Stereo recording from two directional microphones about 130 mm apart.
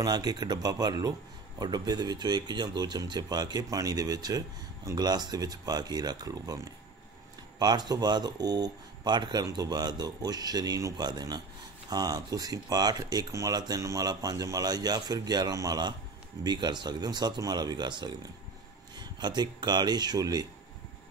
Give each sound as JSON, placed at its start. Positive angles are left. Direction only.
{"t": 0.0, "sound": "speech", "side_deg": -30}